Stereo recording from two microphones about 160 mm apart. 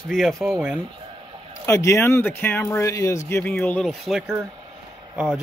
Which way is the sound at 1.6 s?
20° left (ahead or behind).